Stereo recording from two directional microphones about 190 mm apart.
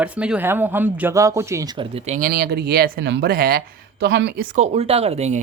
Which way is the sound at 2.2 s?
55° right (ahead or behind).